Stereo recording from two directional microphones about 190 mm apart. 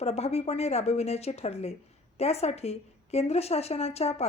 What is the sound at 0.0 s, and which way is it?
A woman's voice, 35° left (ahead or behind).